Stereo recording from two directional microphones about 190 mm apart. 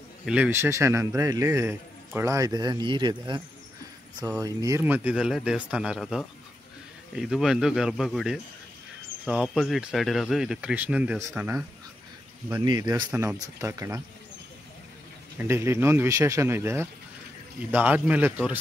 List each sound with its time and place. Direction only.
0.2 s a man's voice: 5° right (ahead or behind)
12.6 s a man's voice: 20° right (ahead or behind)
15.3 s a man's voice: 15° right (ahead or behind)